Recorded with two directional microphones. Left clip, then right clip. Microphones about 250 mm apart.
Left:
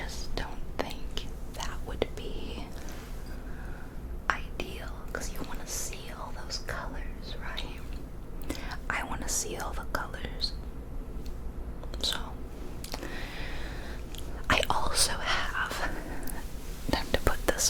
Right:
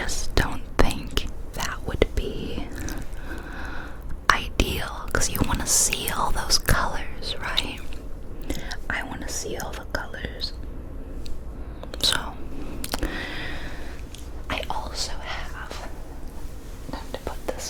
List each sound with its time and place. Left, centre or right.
0.0 s whispering: right
1.7 s whispering: right
4.3 s whispering: right
8.4 s whispering: right
11.9 s chewing: right
12.8 s a sound: right
14.4 s whispering: left
16.9 s whispering: left